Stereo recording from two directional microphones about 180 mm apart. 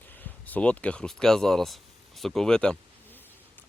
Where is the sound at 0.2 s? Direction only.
10° left (ahead or behind).